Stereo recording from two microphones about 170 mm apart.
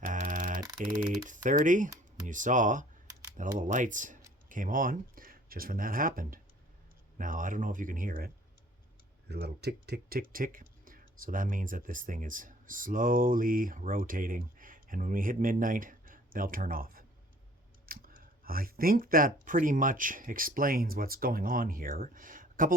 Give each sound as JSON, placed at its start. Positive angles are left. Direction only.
{"t": 0.0, "sound": "a sound", "side_deg": -55}
{"t": 0.9, "sound": "speech", "side_deg": -50}
{"t": 9.3, "sound": "speech", "side_deg": -75}